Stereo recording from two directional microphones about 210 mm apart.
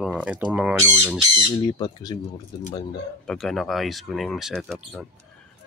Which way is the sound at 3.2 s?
Centre (ahead or behind).